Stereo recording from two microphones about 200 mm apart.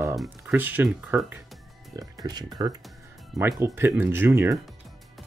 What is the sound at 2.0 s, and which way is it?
Speech, 20° right (ahead or behind).